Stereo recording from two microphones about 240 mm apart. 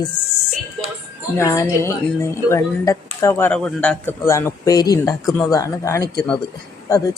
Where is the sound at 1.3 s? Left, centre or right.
Centre.